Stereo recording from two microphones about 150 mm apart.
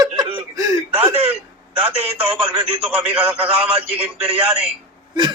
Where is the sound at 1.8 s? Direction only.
10° right (ahead or behind).